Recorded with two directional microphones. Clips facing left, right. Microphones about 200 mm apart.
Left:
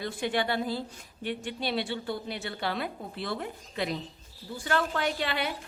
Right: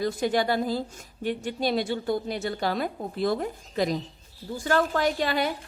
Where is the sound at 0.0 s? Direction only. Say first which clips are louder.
Right 5 dB; 40° right (ahead or behind).